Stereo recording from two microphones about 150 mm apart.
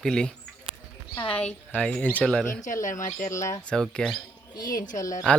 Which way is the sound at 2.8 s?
60° left (ahead or behind).